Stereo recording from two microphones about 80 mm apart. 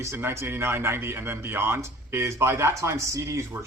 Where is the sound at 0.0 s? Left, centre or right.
Right.